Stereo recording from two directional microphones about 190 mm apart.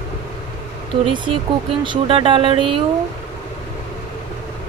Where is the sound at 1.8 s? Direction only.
25° right (ahead or behind).